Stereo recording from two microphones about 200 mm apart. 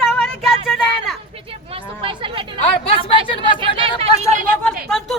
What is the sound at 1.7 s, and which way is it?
Chatter, 25° right (ahead or behind).